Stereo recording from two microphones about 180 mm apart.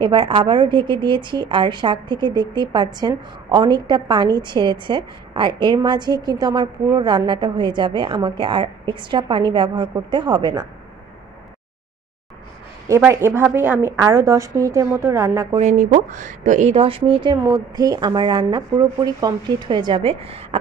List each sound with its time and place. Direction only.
0.0 s a woman's voice: 25° right (ahead or behind)
12.8 s a woman's voice: 15° right (ahead or behind)
15.5 s a woman's voice: 40° right (ahead or behind)